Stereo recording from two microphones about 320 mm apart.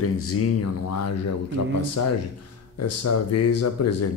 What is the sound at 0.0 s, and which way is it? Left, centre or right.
Speech, left.